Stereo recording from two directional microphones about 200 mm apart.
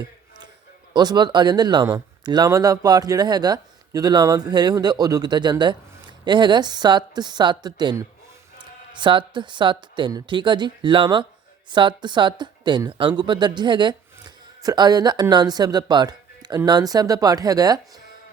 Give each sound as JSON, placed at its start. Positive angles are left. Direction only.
{"t": 0.9, "sound": "speech", "side_deg": -20}